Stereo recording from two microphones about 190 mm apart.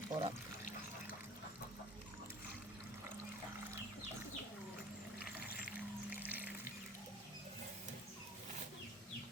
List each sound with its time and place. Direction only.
0.1 s speech: 30° right (ahead or behind)
6.1 s music: 10° right (ahead or behind)